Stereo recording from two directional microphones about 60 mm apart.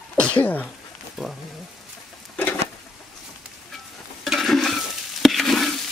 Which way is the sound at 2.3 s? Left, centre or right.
Left.